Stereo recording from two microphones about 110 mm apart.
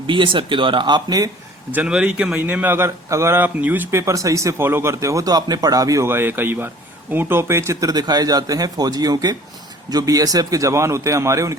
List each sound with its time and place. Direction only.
0.1 s speech: 50° right (ahead or behind)
1.7 s speech: 10° right (ahead or behind)
4.0 s speech: 30° right (ahead or behind)
6.1 s speech: 20° right (ahead or behind)